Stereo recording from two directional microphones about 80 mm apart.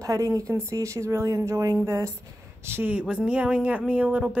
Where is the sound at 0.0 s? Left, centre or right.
Right.